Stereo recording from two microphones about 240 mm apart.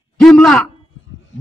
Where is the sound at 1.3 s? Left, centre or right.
Left.